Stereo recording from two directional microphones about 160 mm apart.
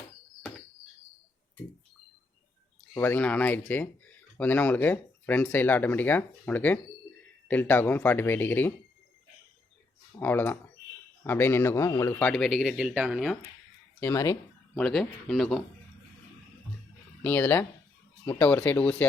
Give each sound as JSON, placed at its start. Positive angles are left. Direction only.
{"t": 2.9, "sound": "speech", "side_deg": 15}
{"t": 10.2, "sound": "speech", "side_deg": 10}
{"t": 12.3, "sound": "speech", "side_deg": 0}
{"t": 14.0, "sound": "speech", "side_deg": 20}
{"t": 14.8, "sound": "speech", "side_deg": 5}
{"t": 17.2, "sound": "speech", "side_deg": 10}